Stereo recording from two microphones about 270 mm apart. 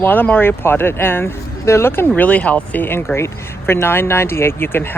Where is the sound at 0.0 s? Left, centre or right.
Centre.